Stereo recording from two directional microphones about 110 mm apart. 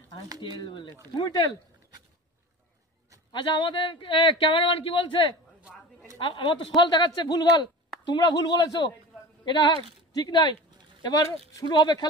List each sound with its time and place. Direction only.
0.4 s speech: 50° left (ahead or behind)
3.3 s speech: 45° left (ahead or behind)